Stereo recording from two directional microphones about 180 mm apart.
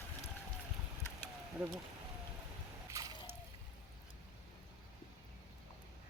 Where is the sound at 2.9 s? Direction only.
20° right (ahead or behind).